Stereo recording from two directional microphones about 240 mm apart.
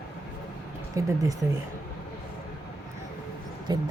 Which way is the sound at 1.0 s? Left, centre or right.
Centre.